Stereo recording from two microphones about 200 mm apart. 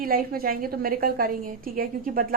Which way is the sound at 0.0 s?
45° right (ahead or behind).